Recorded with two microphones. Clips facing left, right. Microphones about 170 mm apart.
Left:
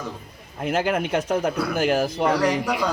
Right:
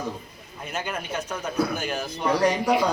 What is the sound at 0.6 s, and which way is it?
Speech, 90° left.